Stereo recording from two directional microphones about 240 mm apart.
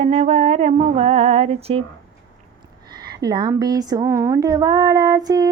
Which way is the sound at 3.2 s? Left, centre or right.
Centre.